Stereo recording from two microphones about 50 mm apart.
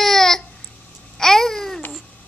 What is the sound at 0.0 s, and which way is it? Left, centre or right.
Babbling, centre.